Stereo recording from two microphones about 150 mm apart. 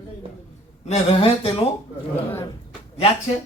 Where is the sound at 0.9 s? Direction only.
40° left (ahead or behind).